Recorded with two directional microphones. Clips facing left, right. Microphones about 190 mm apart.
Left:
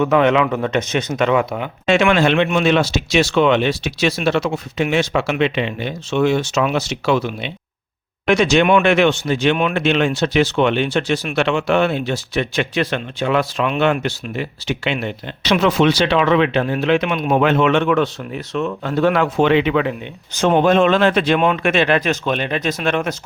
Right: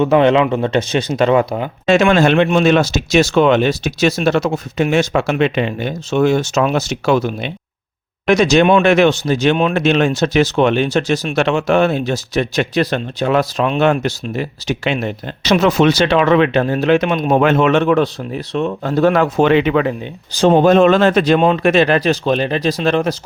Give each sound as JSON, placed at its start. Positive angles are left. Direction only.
{"t": 0.0, "sound": "speech", "side_deg": -30}
{"t": 20.3, "sound": "speech", "side_deg": -35}